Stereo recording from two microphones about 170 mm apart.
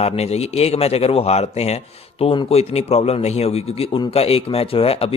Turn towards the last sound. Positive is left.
turn(degrees=35)  # may be behind; listen again after turning